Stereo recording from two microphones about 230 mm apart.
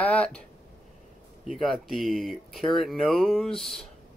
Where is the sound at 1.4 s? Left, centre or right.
Centre.